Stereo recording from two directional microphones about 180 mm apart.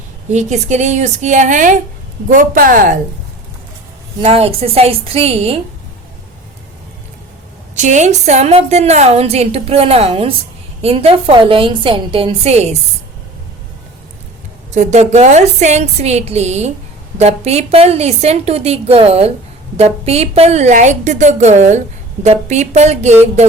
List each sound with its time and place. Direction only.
0.3 s a woman's voice: 40° right (ahead or behind)
4.2 s a woman's voice: 35° right (ahead or behind)
7.8 s a woman's voice: 40° right (ahead or behind)
14.7 s a woman's voice: 40° right (ahead or behind)